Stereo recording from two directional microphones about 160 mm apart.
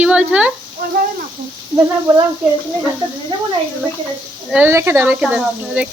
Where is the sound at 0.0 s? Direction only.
5° right (ahead or behind).